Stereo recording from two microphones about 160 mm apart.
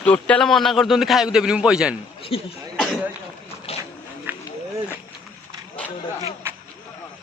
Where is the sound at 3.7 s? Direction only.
40° left (ahead or behind).